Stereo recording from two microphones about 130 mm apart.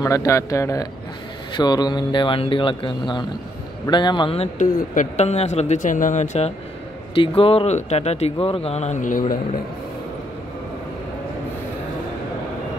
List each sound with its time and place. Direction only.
0.0 s speech: 25° left (ahead or behind)
4.6 s speech: 65° left (ahead or behind)
7.2 s speech: 45° left (ahead or behind); by 9.6 s 80° left